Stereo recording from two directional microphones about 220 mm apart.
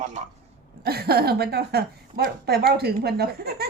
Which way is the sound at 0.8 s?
45° right (ahead or behind).